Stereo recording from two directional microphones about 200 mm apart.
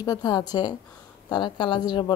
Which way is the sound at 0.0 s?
20° left (ahead or behind).